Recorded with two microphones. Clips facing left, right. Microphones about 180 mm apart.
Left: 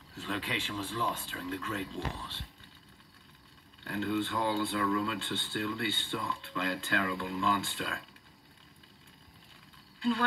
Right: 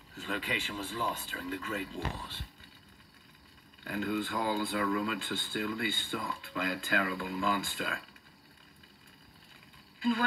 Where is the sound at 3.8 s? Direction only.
10° right (ahead or behind).